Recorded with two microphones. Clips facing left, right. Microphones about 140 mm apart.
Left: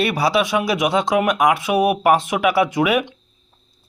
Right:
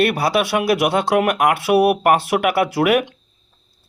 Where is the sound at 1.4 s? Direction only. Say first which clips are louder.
Even; 65° right (ahead or behind).